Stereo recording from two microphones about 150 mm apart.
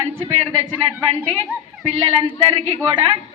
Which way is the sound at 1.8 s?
40° right (ahead or behind).